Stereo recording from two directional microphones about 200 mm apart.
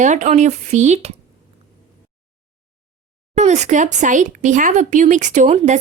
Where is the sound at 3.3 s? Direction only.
35° right (ahead or behind).